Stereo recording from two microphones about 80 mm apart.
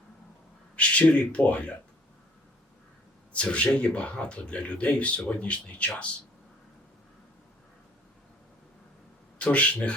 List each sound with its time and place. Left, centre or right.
0.8 s speech: centre
3.3 s speech: centre
9.4 s speech: centre